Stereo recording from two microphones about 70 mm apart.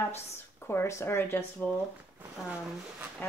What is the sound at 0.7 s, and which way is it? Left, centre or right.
Speech, left.